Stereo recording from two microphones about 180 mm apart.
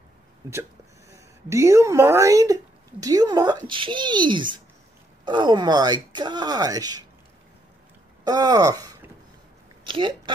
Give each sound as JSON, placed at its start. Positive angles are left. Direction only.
{"t": 1.1, "sound": "speech", "side_deg": -15}
{"t": 8.2, "sound": "speech", "side_deg": -20}